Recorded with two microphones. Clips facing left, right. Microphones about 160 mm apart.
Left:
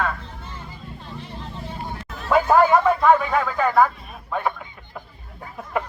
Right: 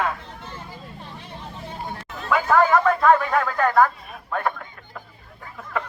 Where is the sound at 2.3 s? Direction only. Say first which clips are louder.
Left 2 dB; 20° left (ahead or behind).